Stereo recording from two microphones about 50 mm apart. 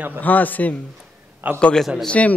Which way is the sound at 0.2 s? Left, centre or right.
Left.